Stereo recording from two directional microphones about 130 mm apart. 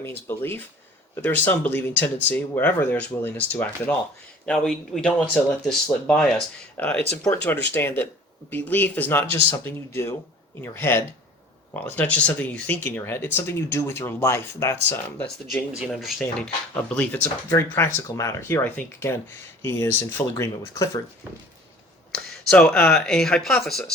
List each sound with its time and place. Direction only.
0.3 s speech: 15° left (ahead or behind)
6.7 s speech: 10° left (ahead or behind)
15.9 s speech: centre (ahead or behind)
16.9 s speech: 10° left (ahead or behind)
22.1 s speech: 5° left (ahead or behind)